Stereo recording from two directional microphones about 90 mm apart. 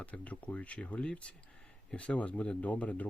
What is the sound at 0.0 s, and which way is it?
Speech, 15° left (ahead or behind).